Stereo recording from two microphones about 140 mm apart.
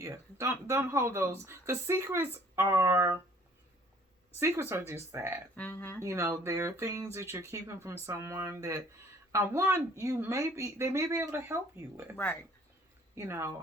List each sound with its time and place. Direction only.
0.0 s speech: 20° right (ahead or behind)
4.4 s speech: 20° right (ahead or behind)
5.5 s speech: 10° left (ahead or behind)
6.0 s speech: 20° right (ahead or behind)
12.1 s speech: 15° left (ahead or behind)
13.1 s speech: 20° right (ahead or behind)